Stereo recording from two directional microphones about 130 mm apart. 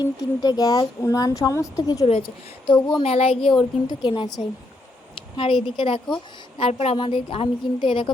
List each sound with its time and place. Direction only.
0.0 s speech: 30° left (ahead or behind)
2.0 s a woman's voice: 45° left (ahead or behind)
4.0 s a woman's voice: 35° left (ahead or behind)
5.1 s a sound: 40° left (ahead or behind)
5.7 s a woman's voice: 40° left (ahead or behind)
6.6 s a woman's voice: 50° left (ahead or behind)